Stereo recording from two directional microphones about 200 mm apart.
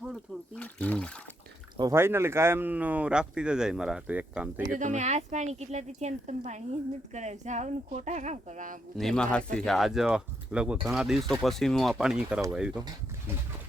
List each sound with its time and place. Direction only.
0.0 s a sound: 5° left (ahead or behind)
1.7 s speech: 15° right (ahead or behind)
4.6 s speech: 35° right (ahead or behind)
9.0 s speech: 5° left (ahead or behind)